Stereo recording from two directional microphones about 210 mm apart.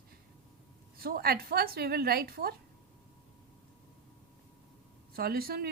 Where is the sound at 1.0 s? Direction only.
45° right (ahead or behind).